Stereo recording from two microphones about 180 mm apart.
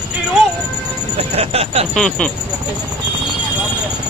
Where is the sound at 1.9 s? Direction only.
5° left (ahead or behind).